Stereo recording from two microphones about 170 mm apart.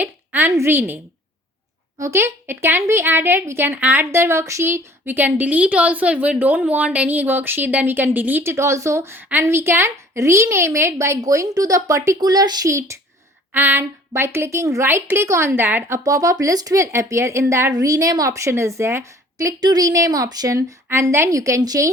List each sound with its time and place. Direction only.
0.0 s a woman's voice: 10° right (ahead or behind)
2.0 s a woman's voice: 15° right (ahead or behind)